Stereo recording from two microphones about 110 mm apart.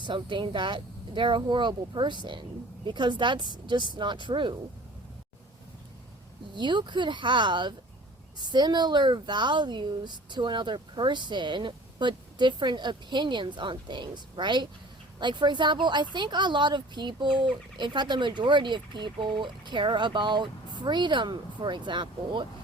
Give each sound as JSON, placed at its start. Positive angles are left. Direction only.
{"t": 0.0, "sound": "speech", "side_deg": -45}
{"t": 6.5, "sound": "speech", "side_deg": -45}